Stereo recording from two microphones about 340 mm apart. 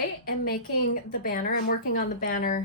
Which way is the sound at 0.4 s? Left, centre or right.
Left.